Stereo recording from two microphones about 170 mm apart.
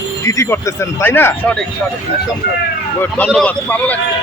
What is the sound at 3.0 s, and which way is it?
Speech, 5° left (ahead or behind).